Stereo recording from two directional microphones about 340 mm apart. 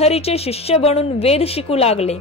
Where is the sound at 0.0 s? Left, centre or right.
Centre.